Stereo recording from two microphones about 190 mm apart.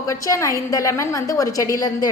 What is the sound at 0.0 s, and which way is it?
A woman's voice, 15° left (ahead or behind).